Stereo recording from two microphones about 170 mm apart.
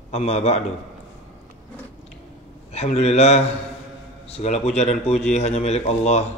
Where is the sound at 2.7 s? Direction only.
40° left (ahead or behind).